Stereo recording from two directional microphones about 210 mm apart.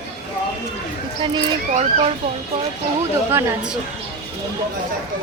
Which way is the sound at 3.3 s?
10° right (ahead or behind).